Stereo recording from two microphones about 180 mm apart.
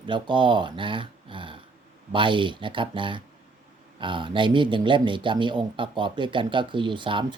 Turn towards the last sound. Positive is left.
turn(degrees=-25)  # may be behind; listen again after turning